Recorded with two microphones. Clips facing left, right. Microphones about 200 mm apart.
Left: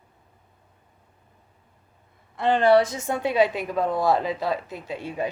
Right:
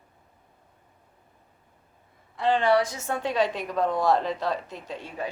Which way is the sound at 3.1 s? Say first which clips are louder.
Left 4 dB; 10° left (ahead or behind).